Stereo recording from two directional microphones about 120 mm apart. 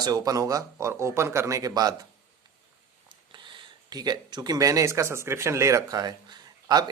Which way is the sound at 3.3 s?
40° right (ahead or behind).